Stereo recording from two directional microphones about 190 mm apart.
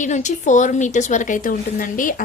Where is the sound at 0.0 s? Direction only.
40° left (ahead or behind).